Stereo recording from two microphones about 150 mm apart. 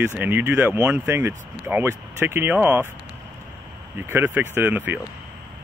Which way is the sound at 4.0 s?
15° right (ahead or behind).